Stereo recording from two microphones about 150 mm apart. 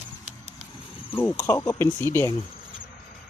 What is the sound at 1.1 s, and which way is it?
Speech, 15° left (ahead or behind).